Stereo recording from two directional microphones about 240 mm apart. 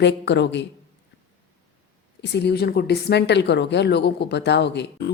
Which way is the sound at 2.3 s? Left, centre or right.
Left.